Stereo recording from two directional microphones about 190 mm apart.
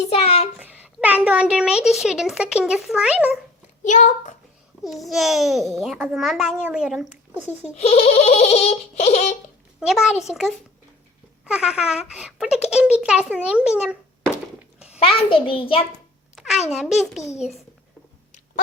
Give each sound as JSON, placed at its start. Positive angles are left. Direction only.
{"t": 0.1, "sound": "a child's voice", "side_deg": 35}
{"t": 0.6, "sound": "a child's voice", "side_deg": -10}
{"t": 3.8, "sound": "baby laughter", "side_deg": 40}
{"t": 4.8, "sound": "a child's voice", "side_deg": 0}
{"t": 7.8, "sound": "baby laughter", "side_deg": 35}
{"t": 9.8, "sound": "a child's voice", "side_deg": 0}
{"t": 14.9, "sound": "a child's voice", "side_deg": 30}
{"t": 16.3, "sound": "a child's voice", "side_deg": 0}